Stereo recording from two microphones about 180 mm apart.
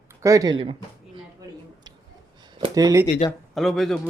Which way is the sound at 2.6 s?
20° right (ahead or behind).